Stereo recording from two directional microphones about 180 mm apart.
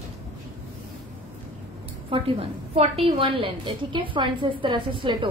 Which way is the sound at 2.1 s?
30° right (ahead or behind).